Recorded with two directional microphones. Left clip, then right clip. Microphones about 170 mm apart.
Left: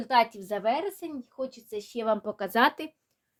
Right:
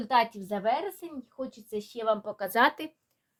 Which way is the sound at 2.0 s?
85° left.